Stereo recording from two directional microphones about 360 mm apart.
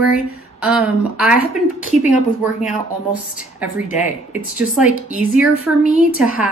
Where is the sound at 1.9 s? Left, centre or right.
Centre.